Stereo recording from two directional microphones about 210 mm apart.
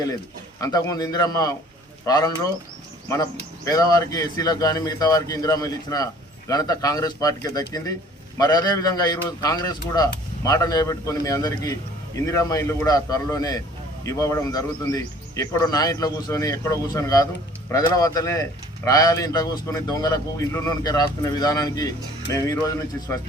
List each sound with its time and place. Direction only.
0.6 s a man's voice: 15° left (ahead or behind)